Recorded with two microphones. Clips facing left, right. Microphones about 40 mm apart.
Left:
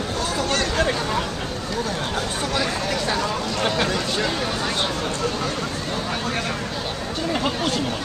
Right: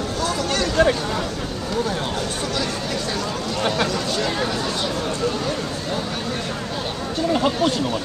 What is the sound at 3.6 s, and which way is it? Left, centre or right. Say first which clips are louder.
Speech: right 1 dB; centre.